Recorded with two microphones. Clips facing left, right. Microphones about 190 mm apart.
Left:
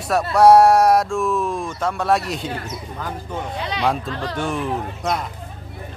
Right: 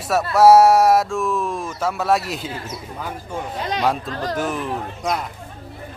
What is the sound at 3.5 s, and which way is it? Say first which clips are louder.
Speech: right 5 dB; 45° right (ahead or behind).